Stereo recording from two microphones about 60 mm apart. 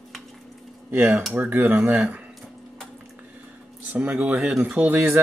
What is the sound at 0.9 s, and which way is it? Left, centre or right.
Speech, right.